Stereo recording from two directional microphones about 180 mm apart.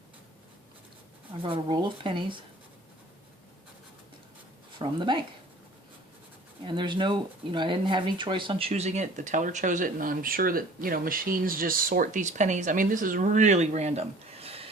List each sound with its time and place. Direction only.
1.4 s speech: 30° right (ahead or behind)
4.8 s speech: 25° right (ahead or behind)
6.7 s speech: 25° right (ahead or behind)